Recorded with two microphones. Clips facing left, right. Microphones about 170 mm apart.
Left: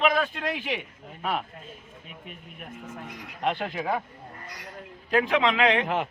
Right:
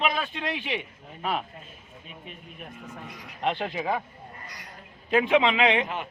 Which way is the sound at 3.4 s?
5° left (ahead or behind).